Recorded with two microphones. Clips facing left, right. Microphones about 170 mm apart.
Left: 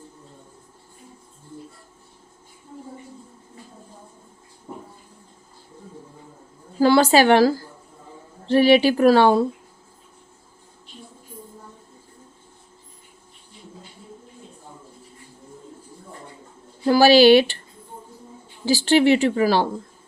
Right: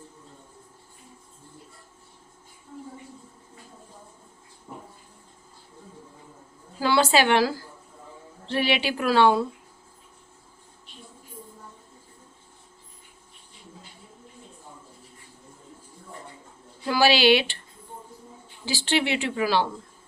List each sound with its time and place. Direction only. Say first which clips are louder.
6.7 s speech: left 6 dB; 45° left (ahead or behind)
16.8 s speech: left 7 dB; 45° left (ahead or behind)
18.6 s speech: left 9 dB; 40° left (ahead or behind)